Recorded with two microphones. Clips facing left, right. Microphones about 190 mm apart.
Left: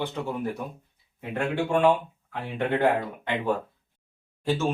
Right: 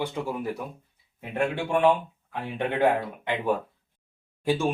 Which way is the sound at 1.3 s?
15° right (ahead or behind).